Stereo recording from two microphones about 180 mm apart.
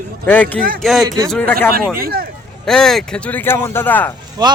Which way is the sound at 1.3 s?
10° left (ahead or behind).